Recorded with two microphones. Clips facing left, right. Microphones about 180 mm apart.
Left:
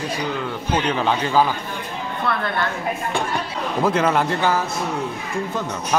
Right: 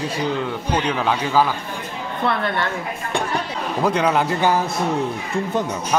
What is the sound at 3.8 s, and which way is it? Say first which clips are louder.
Speech: even; centre (ahead or behind).